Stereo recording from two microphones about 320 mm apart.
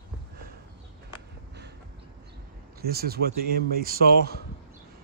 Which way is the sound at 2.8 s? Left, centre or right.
Right.